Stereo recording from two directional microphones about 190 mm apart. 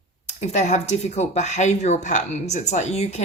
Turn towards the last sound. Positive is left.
turn(degrees=35)  # may be behind; listen again after turning